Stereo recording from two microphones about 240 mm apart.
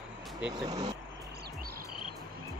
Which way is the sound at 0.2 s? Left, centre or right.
Centre.